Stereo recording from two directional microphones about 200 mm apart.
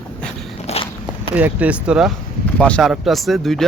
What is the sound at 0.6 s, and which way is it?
Walk, 30° left (ahead or behind).